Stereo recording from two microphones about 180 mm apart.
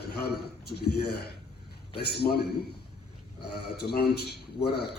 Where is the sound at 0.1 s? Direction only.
60° left (ahead or behind).